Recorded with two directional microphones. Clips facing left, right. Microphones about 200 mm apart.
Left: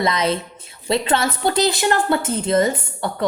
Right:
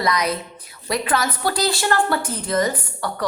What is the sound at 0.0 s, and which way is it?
A woman's voice, 25° left (ahead or behind).